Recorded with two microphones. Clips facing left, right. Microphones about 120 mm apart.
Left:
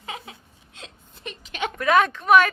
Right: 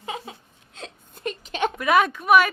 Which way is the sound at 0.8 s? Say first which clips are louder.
Right 7 dB; 50° right (ahead or behind).